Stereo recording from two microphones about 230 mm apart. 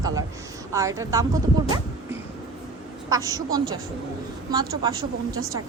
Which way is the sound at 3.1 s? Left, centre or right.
Centre.